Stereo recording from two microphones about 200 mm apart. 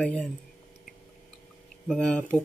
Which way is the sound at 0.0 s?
5° left (ahead or behind).